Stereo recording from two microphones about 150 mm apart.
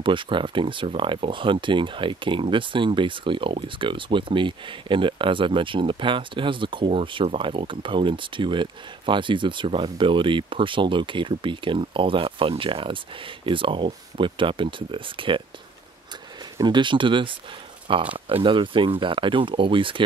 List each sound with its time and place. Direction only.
0.0 s speech: 35° right (ahead or behind)
16.5 s speech: 30° right (ahead or behind)